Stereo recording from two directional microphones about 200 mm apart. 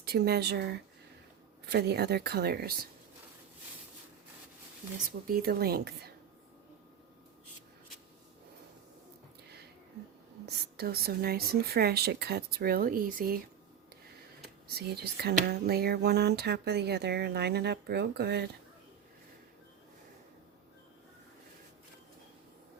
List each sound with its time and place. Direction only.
0.0 s speech: 55° right (ahead or behind)
5.2 s speech: 50° right (ahead or behind)
10.4 s speech: 50° right (ahead or behind)
14.8 s speech: 55° right (ahead or behind)